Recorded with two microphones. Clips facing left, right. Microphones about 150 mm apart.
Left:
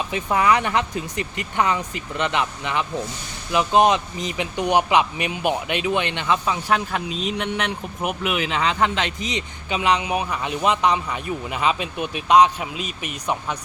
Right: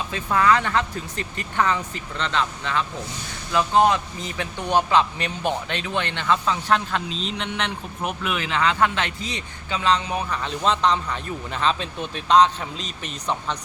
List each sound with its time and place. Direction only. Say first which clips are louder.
0.1 s speech: even; 15° left (ahead or behind)